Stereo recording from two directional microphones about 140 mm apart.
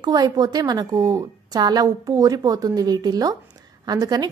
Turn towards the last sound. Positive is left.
turn(degrees=-30)  # may be behind; listen again after turning